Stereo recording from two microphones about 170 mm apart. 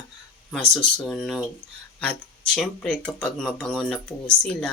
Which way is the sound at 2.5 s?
5° left (ahead or behind).